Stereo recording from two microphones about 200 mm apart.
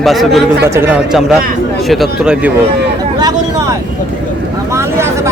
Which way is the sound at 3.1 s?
20° right (ahead or behind).